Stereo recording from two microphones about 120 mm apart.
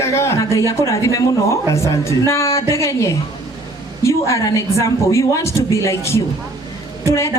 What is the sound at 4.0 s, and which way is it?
A woman's voice, 25° left (ahead or behind).